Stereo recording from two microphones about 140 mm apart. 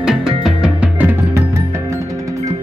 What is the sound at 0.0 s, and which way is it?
Music, 5° right (ahead or behind).